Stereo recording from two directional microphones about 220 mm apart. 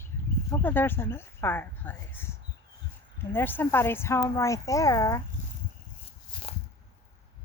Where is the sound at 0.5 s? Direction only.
10° left (ahead or behind).